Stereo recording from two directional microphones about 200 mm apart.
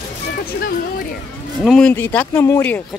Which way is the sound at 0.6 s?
45° left (ahead or behind).